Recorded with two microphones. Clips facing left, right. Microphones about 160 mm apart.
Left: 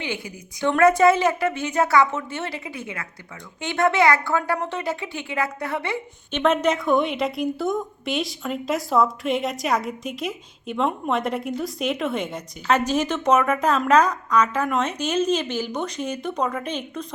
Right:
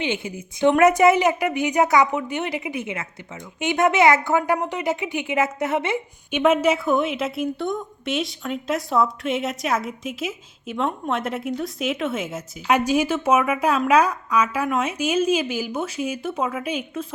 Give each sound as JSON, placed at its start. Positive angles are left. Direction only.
{"t": 0.0, "sound": "a woman's voice", "side_deg": -20}
{"t": 6.3, "sound": "a woman's voice", "side_deg": -5}